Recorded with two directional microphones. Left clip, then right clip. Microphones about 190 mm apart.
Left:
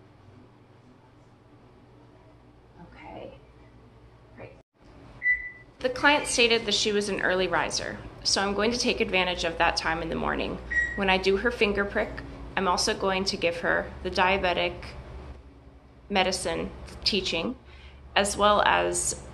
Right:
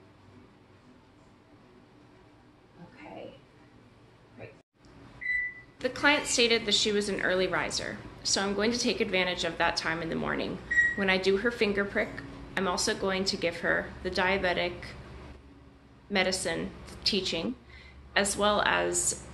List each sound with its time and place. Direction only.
5.8 s a woman's voice: 20° right (ahead or behind)
16.1 s a woman's voice: 20° right (ahead or behind)